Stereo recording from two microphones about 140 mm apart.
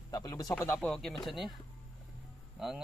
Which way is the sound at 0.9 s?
5° left (ahead or behind).